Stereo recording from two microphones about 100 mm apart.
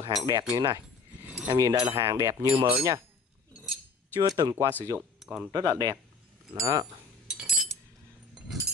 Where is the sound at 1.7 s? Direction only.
75° right (ahead or behind).